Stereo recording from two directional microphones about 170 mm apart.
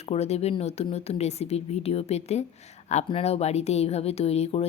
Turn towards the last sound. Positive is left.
turn(degrees=35)  # may be behind; listen again after turning